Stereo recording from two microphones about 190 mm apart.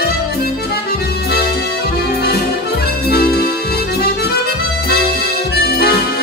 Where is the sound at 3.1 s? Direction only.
55° left (ahead or behind).